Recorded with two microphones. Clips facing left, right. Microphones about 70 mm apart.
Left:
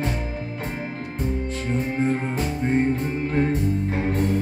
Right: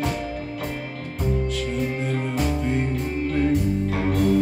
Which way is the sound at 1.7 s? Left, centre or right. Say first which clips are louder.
Left 2 dB; left.